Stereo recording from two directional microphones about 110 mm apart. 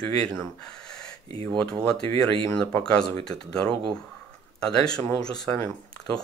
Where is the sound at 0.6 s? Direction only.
5° left (ahead or behind).